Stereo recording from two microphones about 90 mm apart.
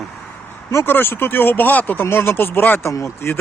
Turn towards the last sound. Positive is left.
turn(degrees=25)  # may be behind; listen again after turning